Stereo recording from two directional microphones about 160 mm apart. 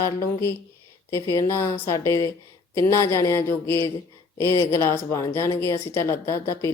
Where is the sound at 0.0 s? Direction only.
20° left (ahead or behind).